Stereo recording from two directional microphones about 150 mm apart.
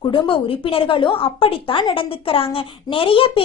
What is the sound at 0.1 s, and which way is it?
A woman's voice, 35° left (ahead or behind).